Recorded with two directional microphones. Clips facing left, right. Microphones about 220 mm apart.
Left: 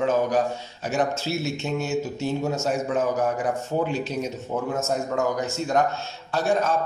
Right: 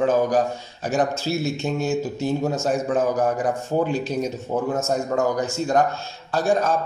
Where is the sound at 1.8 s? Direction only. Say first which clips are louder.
Right 3 dB; 35° right (ahead or behind).